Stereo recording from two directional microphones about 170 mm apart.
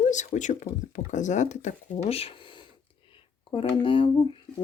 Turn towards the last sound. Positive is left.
turn(degrees=30)  # may be behind; listen again after turning